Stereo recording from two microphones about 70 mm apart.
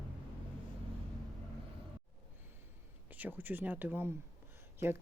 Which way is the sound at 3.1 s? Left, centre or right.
Right.